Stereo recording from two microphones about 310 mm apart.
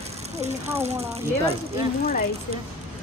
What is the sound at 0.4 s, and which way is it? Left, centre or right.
Speech, right.